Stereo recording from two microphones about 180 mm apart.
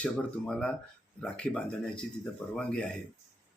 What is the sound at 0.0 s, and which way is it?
Speech, 5° left (ahead or behind).